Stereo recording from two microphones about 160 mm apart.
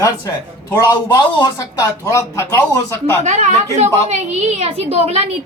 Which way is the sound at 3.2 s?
50° right (ahead or behind).